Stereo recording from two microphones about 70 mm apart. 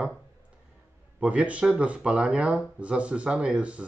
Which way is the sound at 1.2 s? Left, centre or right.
Centre.